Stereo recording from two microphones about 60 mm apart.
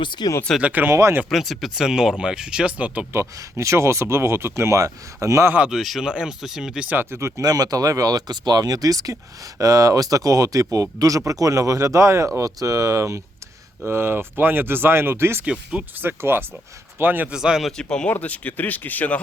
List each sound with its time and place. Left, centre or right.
0.6 s speech: right
0.9 s speech: right
1.3 s speech: centre; by 3.1 s right
3.3 s speech: right
5.7 s speech: centre
6.1 s speech: centre
7.0 s speech: right
7.4 s speech: right
12.5 s speech: right
13.8 s speech: right
17.3 s speech: centre
17.7 s speech: centre
18.1 s speech: left